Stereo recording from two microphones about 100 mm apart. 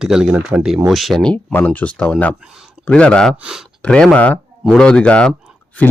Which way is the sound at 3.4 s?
5° right (ahead or behind).